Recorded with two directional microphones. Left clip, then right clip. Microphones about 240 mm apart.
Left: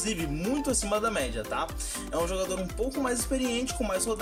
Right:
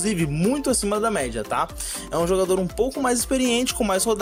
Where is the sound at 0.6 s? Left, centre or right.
Right.